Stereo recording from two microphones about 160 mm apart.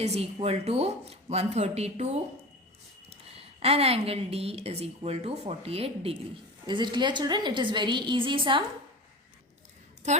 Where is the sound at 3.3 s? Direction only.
40° right (ahead or behind).